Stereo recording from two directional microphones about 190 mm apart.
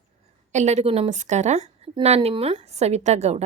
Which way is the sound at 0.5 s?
35° right (ahead or behind).